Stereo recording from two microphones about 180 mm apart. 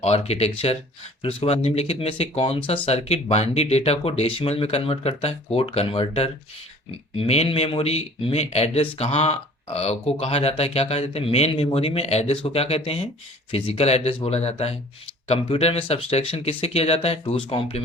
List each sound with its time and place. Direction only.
0.0 s speech: 35° left (ahead or behind)